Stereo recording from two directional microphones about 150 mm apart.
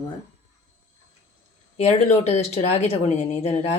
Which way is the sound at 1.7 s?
45° left (ahead or behind).